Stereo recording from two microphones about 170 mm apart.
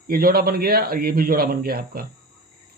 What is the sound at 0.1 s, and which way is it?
Speech, 60° right (ahead or behind).